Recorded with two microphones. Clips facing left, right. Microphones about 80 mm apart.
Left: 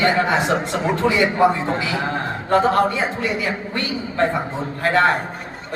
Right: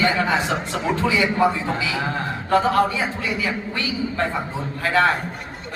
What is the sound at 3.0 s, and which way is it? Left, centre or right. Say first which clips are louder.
Speech: left 2 dB; left.